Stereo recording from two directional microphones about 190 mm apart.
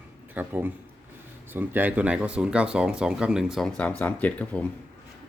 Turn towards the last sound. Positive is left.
turn(degrees=5)  # may be behind; listen again after turning